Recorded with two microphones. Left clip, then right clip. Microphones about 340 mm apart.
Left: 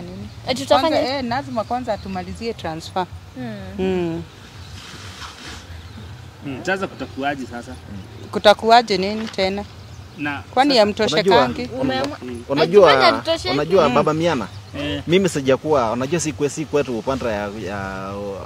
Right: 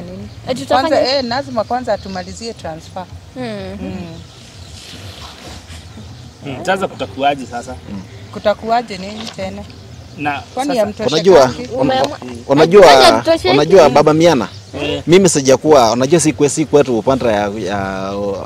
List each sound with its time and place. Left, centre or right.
0.5 s a woman's voice: centre
0.9 s speech: centre
2.4 s speech: centre
2.9 s speech: left
3.3 s speech: right
6.6 s speech: right
8.4 s speech: left
10.2 s speech: right
10.5 s speech: left
11.2 s speech: right
11.9 s speech: right
12.6 s speech: right
13.3 s speech: right
13.6 s speech: right